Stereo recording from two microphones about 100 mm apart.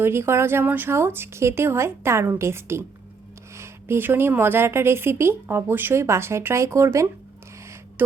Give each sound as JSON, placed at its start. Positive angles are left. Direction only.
{"t": 0.0, "sound": "a woman's voice", "side_deg": -25}